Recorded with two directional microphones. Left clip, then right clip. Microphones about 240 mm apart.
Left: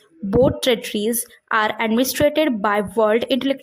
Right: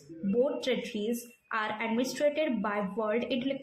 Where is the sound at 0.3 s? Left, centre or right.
Left.